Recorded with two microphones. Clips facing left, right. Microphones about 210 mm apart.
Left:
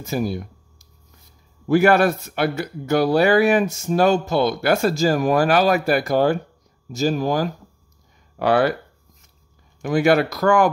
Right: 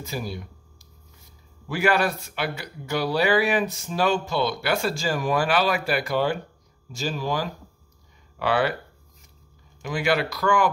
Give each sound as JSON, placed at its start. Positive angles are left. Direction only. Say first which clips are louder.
{"t": 0.0, "sound": "speech", "louder": "left 8 dB", "side_deg": 45}
{"t": 9.8, "sound": "speech", "louder": "left 7 dB", "side_deg": 50}